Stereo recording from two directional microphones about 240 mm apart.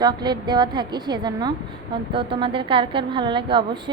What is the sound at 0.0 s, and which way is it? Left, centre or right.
A woman's voice, centre.